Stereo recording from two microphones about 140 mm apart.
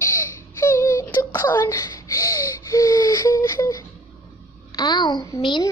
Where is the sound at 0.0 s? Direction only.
20° left (ahead or behind).